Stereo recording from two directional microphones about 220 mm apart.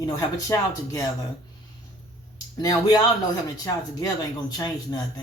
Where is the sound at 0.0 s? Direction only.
15° left (ahead or behind).